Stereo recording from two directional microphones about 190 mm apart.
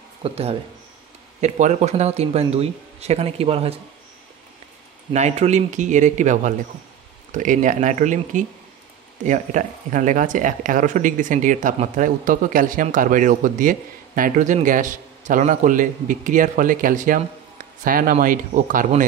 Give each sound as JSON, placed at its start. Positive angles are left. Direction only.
{"t": 0.2, "sound": "speech", "side_deg": -30}
{"t": 5.1, "sound": "speech", "side_deg": -35}